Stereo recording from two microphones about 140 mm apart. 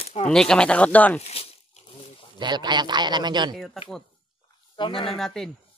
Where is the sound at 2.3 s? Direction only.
30° right (ahead or behind).